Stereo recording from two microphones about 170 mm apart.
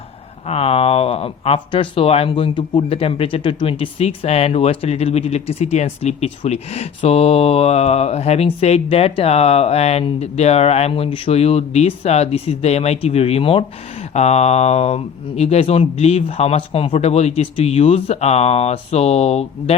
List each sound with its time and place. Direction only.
0.4 s speech: 35° left (ahead or behind)